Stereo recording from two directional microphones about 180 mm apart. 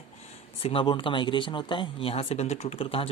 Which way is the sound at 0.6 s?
30° left (ahead or behind).